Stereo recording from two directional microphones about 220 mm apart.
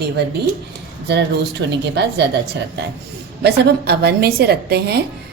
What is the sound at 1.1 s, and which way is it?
A woman's voice, 50° right (ahead or behind).